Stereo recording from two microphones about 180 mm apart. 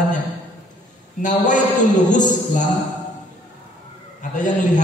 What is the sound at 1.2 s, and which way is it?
A man's voice, 45° left (ahead or behind).